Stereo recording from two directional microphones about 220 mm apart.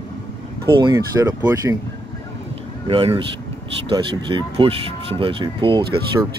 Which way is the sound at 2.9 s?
25° right (ahead or behind).